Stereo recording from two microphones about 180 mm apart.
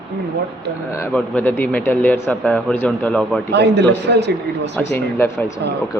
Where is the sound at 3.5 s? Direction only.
70° right (ahead or behind).